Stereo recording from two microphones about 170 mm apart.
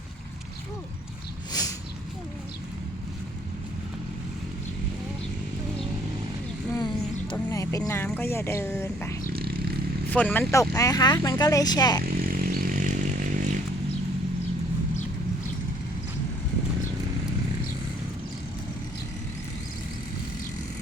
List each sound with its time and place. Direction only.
1.5 s a sound: 20° left (ahead or behind)
6.7 s a sound: 25° left (ahead or behind)
7.3 s speech: 20° left (ahead or behind)
9.3 s vehicle: 65° right (ahead or behind)
10.1 s speech: 10° left (ahead or behind)
12.0 s vehicle: 60° right (ahead or behind)